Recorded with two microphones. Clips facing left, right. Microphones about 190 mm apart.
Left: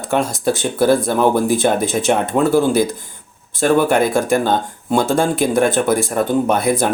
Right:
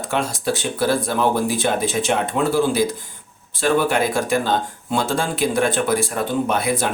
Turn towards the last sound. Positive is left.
turn(degrees=45)  # may be behind; listen again after turning